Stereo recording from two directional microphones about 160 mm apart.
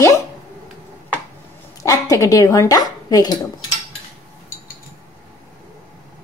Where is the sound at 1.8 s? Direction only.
20° left (ahead or behind).